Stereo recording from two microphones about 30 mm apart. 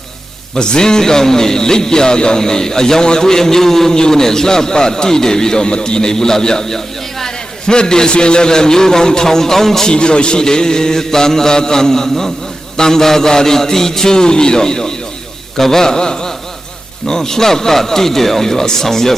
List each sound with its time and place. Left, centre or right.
0.5 s a man's voice: left
7.7 s a man's voice: left
9.8 s a man's voice: left; by 19.1 s centre